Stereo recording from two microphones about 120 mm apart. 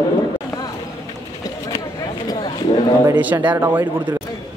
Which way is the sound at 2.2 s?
40° left (ahead or behind).